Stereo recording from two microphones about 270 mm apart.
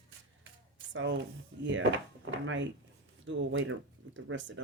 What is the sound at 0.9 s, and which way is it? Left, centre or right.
Speech, right.